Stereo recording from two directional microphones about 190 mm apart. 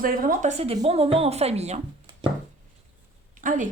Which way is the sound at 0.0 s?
50° right (ahead or behind).